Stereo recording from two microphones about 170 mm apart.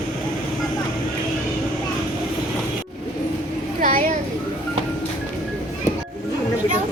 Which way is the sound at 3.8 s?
55° right (ahead or behind).